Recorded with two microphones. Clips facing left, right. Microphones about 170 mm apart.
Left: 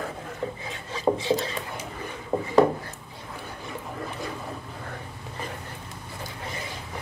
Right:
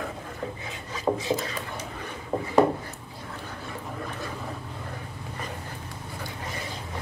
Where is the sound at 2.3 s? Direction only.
5° left (ahead or behind).